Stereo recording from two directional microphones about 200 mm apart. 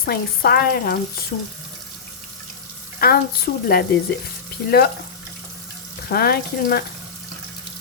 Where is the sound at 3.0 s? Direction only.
50° left (ahead or behind).